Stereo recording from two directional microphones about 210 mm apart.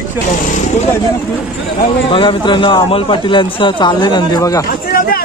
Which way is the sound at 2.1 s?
25° left (ahead or behind).